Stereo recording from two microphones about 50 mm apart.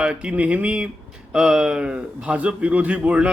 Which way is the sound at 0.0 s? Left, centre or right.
Centre.